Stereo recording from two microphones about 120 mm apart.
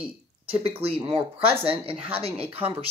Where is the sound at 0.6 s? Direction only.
50° right (ahead or behind).